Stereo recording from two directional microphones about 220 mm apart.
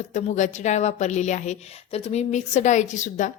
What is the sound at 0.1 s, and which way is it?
A woman's voice, 35° left (ahead or behind).